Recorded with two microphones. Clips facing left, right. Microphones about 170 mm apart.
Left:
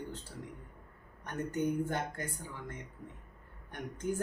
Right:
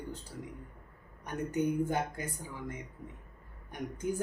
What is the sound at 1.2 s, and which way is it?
Speech, 10° right (ahead or behind).